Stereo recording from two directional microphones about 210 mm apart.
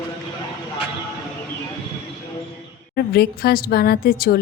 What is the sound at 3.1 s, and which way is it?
A woman's voice, 50° left (ahead or behind).